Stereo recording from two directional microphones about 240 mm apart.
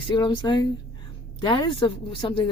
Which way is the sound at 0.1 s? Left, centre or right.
Centre.